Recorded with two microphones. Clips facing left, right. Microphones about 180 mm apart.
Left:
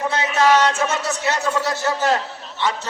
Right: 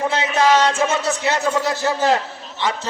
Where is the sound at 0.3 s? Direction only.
20° right (ahead or behind).